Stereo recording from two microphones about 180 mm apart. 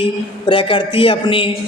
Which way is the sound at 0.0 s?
30° left (ahead or behind).